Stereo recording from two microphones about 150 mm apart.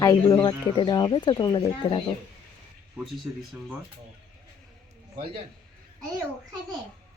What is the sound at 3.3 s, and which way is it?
Speech, 10° right (ahead or behind).